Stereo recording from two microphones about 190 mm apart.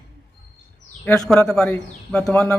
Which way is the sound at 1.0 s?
5° left (ahead or behind).